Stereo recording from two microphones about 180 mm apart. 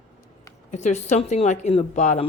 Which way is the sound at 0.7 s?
40° left (ahead or behind).